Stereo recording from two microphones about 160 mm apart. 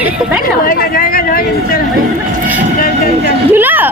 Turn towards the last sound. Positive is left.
turn(degrees=-10)  # may be behind; listen again after turning